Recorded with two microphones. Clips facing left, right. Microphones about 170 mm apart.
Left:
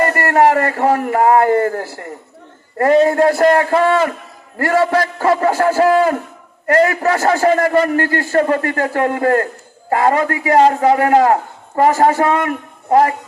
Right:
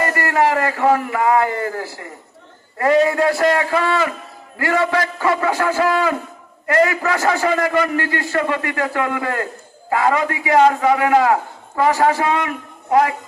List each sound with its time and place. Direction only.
0.1 s a man's voice: 50° left (ahead or behind)